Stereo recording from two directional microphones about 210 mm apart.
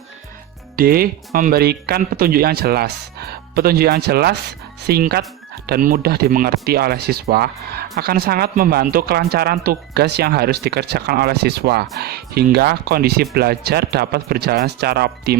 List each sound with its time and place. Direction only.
0.8 s speech: 45° right (ahead or behind)